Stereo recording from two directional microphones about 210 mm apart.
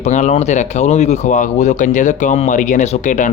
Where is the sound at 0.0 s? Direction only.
35° left (ahead or behind).